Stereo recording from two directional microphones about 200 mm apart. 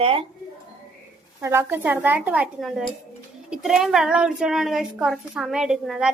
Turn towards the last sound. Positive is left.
turn(degrees=-5)  # may be behind; listen again after turning